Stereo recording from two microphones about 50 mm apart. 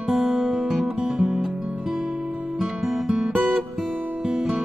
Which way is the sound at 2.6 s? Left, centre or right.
Centre.